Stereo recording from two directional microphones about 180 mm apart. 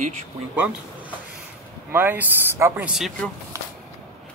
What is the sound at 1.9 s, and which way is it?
Speech, 10° right (ahead or behind).